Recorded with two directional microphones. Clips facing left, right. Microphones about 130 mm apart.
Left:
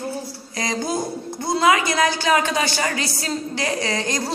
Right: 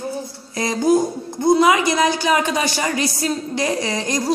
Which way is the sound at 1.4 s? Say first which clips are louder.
Right 4 dB; 20° right (ahead or behind).